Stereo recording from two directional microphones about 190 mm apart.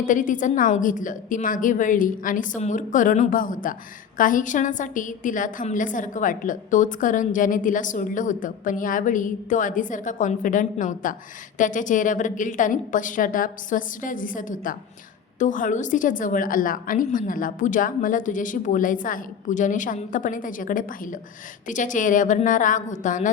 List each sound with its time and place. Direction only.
0.0 s a woman's voice: 45° left (ahead or behind)